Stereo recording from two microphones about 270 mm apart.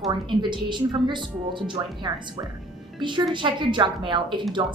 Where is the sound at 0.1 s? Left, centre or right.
Centre.